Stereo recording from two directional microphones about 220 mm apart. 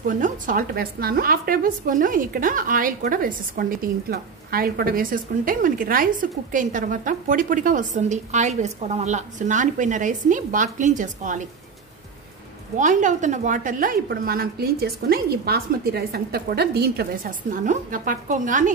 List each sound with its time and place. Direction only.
0.0 s a woman's voice: 40° right (ahead or behind)
12.7 s a woman's voice: 35° right (ahead or behind)